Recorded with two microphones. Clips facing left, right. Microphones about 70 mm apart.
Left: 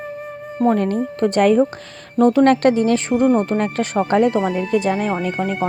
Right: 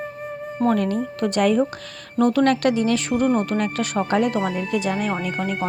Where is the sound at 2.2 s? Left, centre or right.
Left.